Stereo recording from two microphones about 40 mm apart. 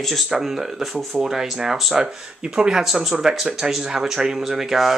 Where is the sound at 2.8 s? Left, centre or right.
Centre.